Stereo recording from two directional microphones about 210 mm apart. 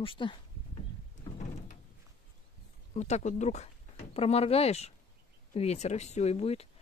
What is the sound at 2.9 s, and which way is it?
Speech, 35° left (ahead or behind).